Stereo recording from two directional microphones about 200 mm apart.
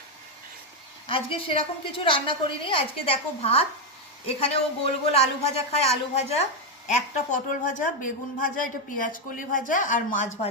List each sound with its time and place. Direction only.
1.0 s a woman's voice: 25° left (ahead or behind)